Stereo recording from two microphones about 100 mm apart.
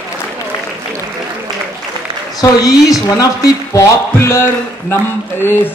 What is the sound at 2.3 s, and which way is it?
A man's voice, 35° left (ahead or behind).